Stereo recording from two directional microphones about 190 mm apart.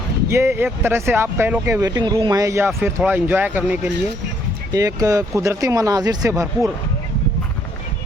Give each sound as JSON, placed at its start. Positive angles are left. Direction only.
{"t": 0.3, "sound": "speech", "side_deg": -15}